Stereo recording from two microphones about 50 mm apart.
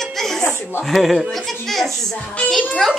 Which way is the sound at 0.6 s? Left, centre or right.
Left.